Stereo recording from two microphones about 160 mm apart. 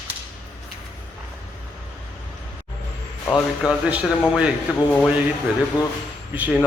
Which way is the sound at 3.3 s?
5° right (ahead or behind).